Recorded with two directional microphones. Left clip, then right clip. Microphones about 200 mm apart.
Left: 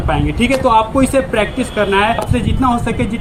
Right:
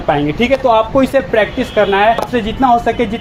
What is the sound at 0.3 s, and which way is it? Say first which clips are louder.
Speech: left 1 dB; 50° left (ahead or behind).